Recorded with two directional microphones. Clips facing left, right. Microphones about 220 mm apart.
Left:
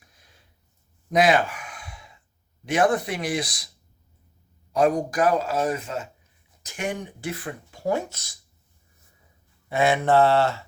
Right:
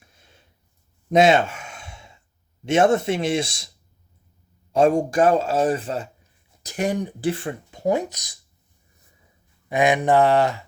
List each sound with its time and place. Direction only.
0.0 s a sound: 25° right (ahead or behind)
2.6 s speech: 25° right (ahead or behind)
4.7 s speech: 25° right (ahead or behind)
9.6 s mantra: 15° right (ahead or behind)